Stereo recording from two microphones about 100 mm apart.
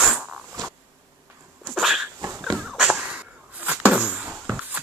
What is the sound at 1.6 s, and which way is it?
Dog, centre (ahead or behind).